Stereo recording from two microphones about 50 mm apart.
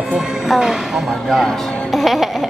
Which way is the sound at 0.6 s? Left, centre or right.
Centre.